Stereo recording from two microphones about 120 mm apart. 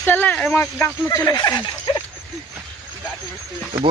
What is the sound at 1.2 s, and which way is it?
Speech, 35° left (ahead or behind).